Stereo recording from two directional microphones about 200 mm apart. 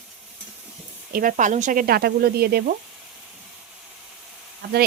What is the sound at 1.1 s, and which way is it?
Speech, 40° right (ahead or behind).